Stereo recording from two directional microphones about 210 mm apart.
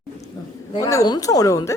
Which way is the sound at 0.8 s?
15° left (ahead or behind).